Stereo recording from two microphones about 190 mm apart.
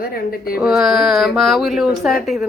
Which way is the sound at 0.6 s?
5° right (ahead or behind).